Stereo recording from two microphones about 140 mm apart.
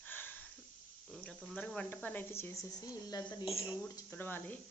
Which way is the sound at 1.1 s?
Centre (ahead or behind).